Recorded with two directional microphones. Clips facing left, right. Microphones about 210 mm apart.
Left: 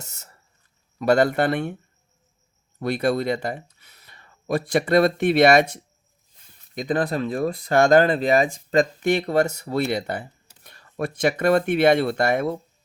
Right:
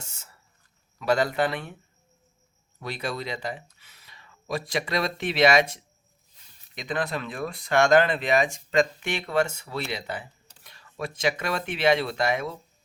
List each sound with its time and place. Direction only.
0.0 s a sound: 40° left (ahead or behind)
0.9 s speech: 60° left (ahead or behind)
2.7 s speech: 60° left (ahead or behind)
6.7 s speech: 40° left (ahead or behind)